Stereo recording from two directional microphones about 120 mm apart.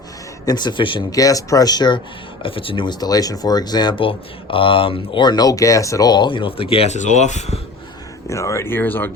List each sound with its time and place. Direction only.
0.4 s speech: 35° left (ahead or behind)
1.1 s speech: 30° left (ahead or behind)
2.4 s speech: 50° left (ahead or behind); by 7.6 s 70° left (ahead or behind)
8.3 s speech: 25° left (ahead or behind)